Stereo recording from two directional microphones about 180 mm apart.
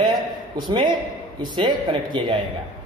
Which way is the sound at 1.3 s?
25° right (ahead or behind).